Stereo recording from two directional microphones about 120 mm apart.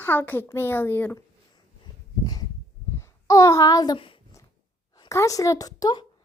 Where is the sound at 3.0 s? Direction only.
25° left (ahead or behind).